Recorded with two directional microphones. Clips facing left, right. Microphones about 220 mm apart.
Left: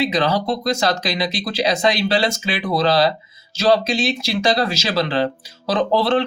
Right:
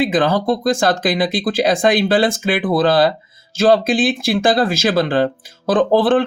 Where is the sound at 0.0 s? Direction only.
50° right (ahead or behind).